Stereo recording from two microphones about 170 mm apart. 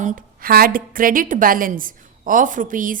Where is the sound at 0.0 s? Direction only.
55° right (ahead or behind).